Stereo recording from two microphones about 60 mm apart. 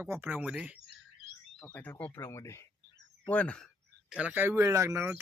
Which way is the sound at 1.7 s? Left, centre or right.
Left.